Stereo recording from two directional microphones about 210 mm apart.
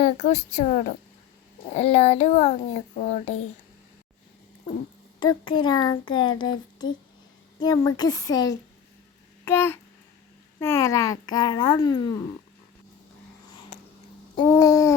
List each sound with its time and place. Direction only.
0.0 s a woman's voice: 30° left (ahead or behind)
5.2 s speech: 20° left (ahead or behind)
7.6 s a child's voice: 20° left (ahead or behind)
9.4 s a sound: 10° left (ahead or behind)
10.6 s a child's voice: 15° left (ahead or behind)
14.4 s a child's voice: 15° left (ahead or behind)